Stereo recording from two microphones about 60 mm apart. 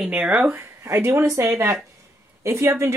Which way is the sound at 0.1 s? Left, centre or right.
Centre.